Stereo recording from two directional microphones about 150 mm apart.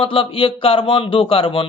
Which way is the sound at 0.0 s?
35° left (ahead or behind).